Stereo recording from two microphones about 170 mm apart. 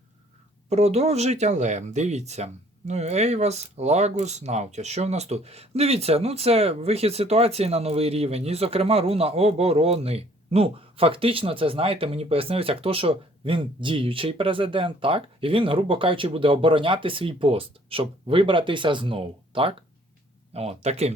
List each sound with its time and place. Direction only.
0.7 s speech: 40° right (ahead or behind)